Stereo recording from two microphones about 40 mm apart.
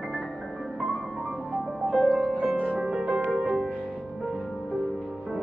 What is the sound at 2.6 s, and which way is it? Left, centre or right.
Music, right.